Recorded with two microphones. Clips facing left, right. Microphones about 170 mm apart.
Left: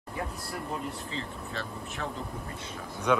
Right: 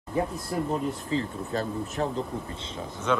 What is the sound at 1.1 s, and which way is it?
Speech, 40° right (ahead or behind).